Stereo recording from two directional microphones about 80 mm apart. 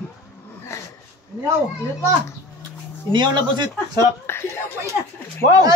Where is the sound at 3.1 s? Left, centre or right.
Right.